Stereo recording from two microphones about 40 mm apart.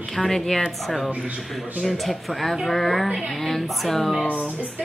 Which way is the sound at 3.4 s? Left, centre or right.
Centre.